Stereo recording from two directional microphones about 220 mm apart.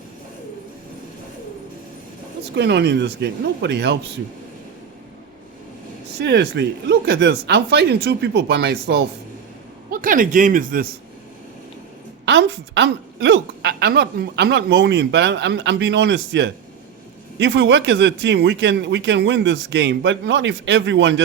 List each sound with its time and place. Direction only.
2.6 s a woman's voice: 50° right (ahead or behind)
6.1 s a woman's voice: 50° right (ahead or behind)
12.2 s a woman's voice: 55° right (ahead or behind)